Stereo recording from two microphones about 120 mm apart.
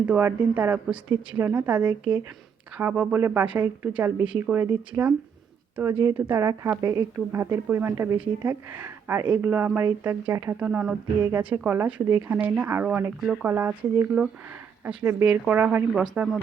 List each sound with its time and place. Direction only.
0.0 s speech: 15° right (ahead or behind)